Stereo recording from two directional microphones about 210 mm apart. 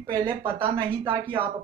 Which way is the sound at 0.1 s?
25° right (ahead or behind).